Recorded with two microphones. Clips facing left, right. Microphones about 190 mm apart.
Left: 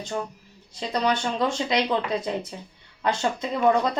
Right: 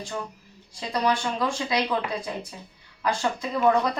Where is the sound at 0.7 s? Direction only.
25° left (ahead or behind).